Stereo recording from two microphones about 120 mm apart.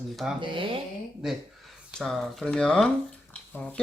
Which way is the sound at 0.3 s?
45° right (ahead or behind).